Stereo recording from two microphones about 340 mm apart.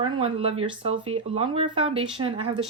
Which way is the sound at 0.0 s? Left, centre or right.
Centre.